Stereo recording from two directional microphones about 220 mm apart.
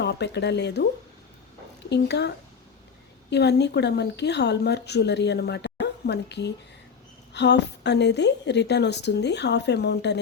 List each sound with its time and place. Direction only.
0.0 s speech: 50° left (ahead or behind)
1.9 s speech: 50° left (ahead or behind)